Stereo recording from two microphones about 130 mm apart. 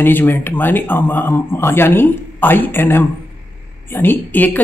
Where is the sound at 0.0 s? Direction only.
15° left (ahead or behind).